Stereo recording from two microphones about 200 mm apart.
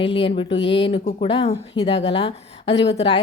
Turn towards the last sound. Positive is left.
turn(degrees=25)  # may be behind; listen again after turning